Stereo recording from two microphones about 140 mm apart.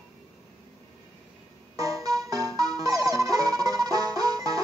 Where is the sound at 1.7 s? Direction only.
25° right (ahead or behind).